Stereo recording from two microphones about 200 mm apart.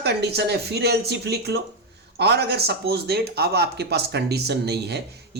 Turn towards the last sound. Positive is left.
turn(degrees=-55)  # may be behind; listen again after turning